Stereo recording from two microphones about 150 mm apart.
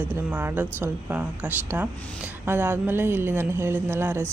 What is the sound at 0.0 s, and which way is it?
Speech, 10° right (ahead or behind).